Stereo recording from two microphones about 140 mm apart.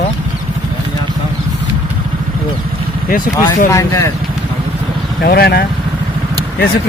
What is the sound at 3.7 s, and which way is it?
Speech, 20° left (ahead or behind).